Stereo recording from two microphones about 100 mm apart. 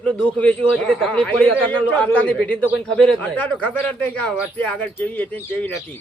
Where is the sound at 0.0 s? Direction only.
15° left (ahead or behind).